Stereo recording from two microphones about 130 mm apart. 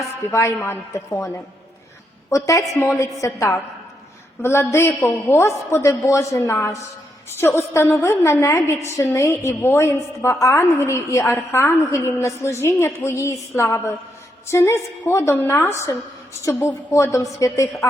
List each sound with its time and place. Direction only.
0.3 s a woman's voice: 20° left (ahead or behind)
2.3 s a woman's voice: 25° left (ahead or behind)